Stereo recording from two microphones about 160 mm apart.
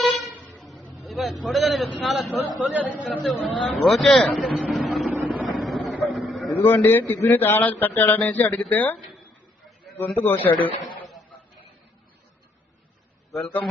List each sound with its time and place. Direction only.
0.6 s vehicle: centre (ahead or behind)
2.6 s speech: 10° right (ahead or behind)
5.1 s vehicle: 10° right (ahead or behind)
5.5 s a sound: centre (ahead or behind)
6.5 s a man's voice: 10° left (ahead or behind)
10.0 s a man's voice: 10° left (ahead or behind)
10.3 s speech: 30° left (ahead or behind)
11.0 s a sound: centre (ahead or behind)
13.3 s speech: centre (ahead or behind)